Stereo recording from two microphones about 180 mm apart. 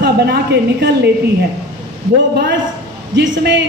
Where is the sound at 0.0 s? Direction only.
65° right (ahead or behind).